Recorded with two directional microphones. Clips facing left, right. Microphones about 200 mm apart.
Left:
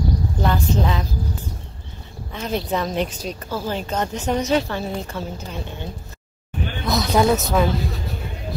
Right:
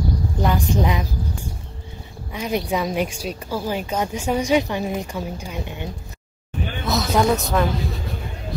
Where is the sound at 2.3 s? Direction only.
15° right (ahead or behind).